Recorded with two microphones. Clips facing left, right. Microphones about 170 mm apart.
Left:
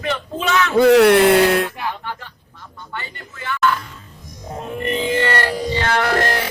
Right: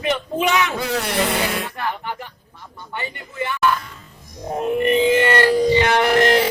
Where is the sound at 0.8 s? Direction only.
65° left (ahead or behind).